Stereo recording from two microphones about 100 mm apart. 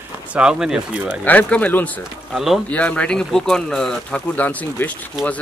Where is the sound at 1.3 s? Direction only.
15° left (ahead or behind).